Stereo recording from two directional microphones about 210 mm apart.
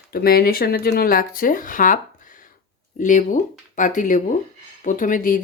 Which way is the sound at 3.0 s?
35° left (ahead or behind).